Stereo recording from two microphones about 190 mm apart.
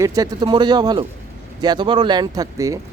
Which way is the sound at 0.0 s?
15° right (ahead or behind).